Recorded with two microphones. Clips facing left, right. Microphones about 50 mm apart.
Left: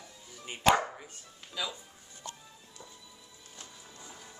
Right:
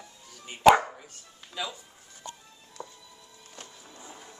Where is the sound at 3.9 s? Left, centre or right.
Right.